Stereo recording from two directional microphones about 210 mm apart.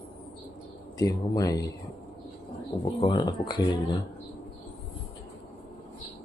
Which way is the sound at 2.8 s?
20° left (ahead or behind).